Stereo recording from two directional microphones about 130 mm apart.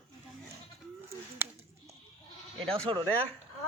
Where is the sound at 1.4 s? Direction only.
20° right (ahead or behind).